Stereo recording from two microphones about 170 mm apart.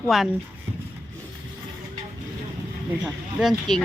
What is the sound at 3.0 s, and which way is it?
Speech, centre (ahead or behind).